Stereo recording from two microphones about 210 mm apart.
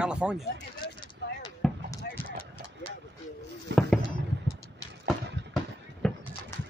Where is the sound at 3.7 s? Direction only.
55° right (ahead or behind).